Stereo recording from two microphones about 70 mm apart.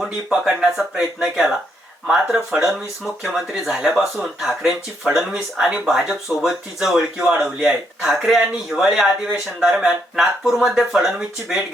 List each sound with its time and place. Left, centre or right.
0.0 s speech: centre